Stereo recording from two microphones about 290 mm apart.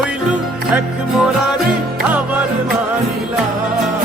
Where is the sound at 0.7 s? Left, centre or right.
Centre.